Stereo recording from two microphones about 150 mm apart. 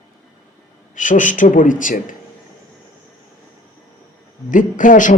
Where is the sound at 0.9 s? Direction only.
60° left (ahead or behind).